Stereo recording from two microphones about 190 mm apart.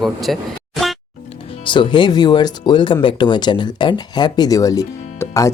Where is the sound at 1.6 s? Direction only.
25° left (ahead or behind).